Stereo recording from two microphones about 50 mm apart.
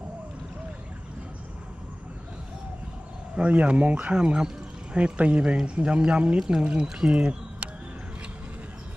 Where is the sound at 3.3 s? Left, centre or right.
Right.